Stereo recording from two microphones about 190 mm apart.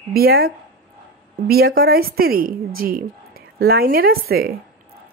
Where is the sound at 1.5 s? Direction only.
50° right (ahead or behind).